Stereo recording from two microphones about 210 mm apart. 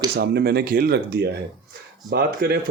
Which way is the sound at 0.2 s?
50° right (ahead or behind).